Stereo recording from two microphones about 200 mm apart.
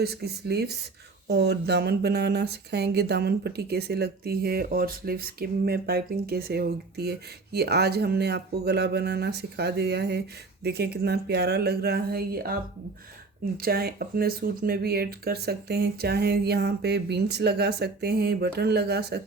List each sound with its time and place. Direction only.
0.0 s speech: 55° right (ahead or behind)
13.6 s speech: 50° right (ahead or behind)